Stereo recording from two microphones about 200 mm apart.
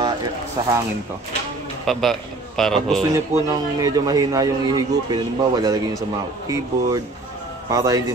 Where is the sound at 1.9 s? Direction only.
Centre (ahead or behind).